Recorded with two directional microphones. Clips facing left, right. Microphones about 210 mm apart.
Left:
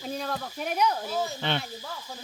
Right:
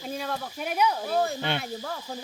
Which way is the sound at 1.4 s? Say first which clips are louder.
Even; 10° right (ahead or behind).